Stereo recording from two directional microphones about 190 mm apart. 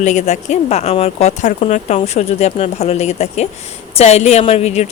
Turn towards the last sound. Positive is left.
turn(degrees=35)  # may be behind; listen again after turning